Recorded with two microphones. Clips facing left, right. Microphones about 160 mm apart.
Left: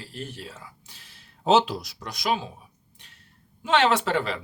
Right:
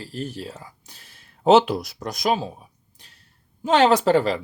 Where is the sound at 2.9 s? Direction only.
40° right (ahead or behind).